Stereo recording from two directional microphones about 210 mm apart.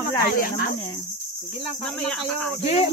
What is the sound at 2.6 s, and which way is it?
Speech, 30° left (ahead or behind).